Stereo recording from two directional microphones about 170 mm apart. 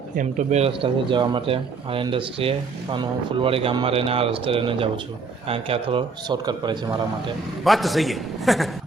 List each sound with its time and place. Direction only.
0.2 s a man's voice: 45° right (ahead or behind); by 6.9 s 25° right (ahead or behind)
7.6 s a man's voice: centre (ahead or behind)